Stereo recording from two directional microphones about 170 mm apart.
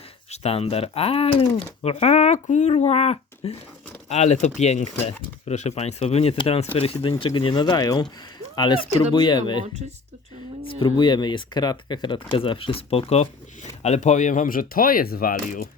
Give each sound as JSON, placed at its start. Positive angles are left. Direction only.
{"t": 0.3, "sound": "speech", "side_deg": 40}
{"t": 10.8, "sound": "speech", "side_deg": 25}